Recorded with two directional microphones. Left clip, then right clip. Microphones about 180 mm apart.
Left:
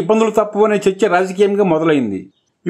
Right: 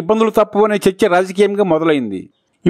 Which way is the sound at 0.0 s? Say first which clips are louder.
Even; 50° right (ahead or behind).